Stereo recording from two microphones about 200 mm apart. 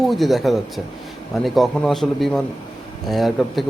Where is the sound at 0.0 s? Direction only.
Centre (ahead or behind).